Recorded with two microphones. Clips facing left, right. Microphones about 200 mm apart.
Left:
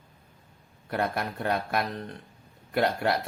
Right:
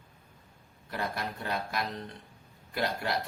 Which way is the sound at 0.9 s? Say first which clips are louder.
Left 6 dB; 60° left (ahead or behind).